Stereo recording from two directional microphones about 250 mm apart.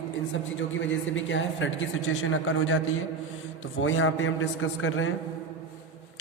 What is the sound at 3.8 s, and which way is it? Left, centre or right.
A man's voice, left.